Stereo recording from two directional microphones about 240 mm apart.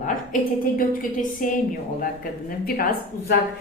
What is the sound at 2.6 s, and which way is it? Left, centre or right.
Speech, left.